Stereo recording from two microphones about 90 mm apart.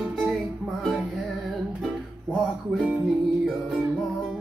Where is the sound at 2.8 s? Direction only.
10° right (ahead or behind).